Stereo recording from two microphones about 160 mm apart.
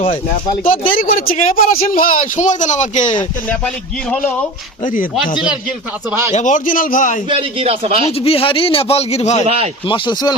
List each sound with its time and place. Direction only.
0.0 s a man's voice: 35° left (ahead or behind)
0.6 s a man's voice: 60° left (ahead or behind)
4.1 s speech: 10° left (ahead or behind)
6.3 s a man's voice: 50° left (ahead or behind)
7.3 s speech: 35° right (ahead or behind)
8.2 s a man's voice: 35° left (ahead or behind)
9.9 s speech: 30° left (ahead or behind)